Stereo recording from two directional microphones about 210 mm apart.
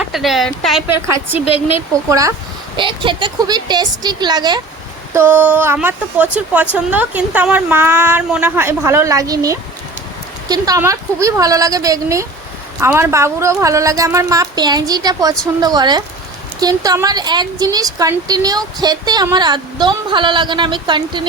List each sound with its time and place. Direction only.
0.0 s speech: centre (ahead or behind)
1.0 s speech: 15° right (ahead or behind)
1.5 s speech: 30° left (ahead or behind)
2.0 s a woman's voice: 15° right (ahead or behind)